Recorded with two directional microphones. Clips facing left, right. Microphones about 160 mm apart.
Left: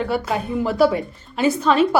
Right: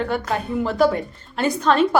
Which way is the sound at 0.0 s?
5° left (ahead or behind).